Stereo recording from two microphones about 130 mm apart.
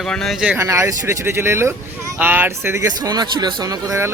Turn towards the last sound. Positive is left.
turn(degrees=-20)  # may be behind; listen again after turning